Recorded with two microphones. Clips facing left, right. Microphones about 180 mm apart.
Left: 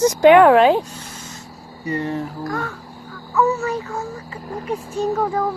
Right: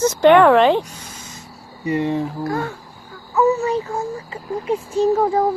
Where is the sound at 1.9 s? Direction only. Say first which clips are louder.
Right 4 dB; 20° right (ahead or behind).